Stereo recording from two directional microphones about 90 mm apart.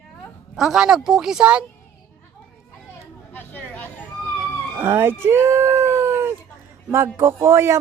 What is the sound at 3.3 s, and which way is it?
Chatter, 20° left (ahead or behind).